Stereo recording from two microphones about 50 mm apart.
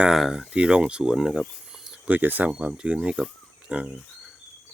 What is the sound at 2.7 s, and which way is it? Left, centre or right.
Speech, centre.